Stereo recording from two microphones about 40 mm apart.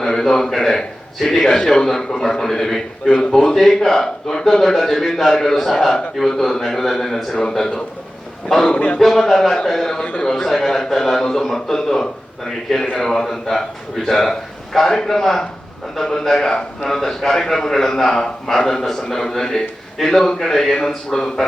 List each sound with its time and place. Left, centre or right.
0.0 s a man's voice: centre
3.1 s speech: left
3.3 s a man's voice: centre
9.0 s a man's voice: centre